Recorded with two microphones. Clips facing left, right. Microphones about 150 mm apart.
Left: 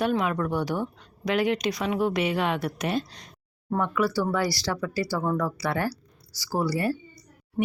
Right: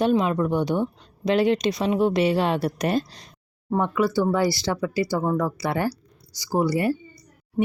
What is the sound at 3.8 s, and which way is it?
Speech, 25° right (ahead or behind).